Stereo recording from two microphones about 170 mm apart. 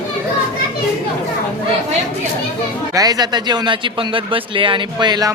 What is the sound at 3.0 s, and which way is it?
A man's voice, 20° right (ahead or behind).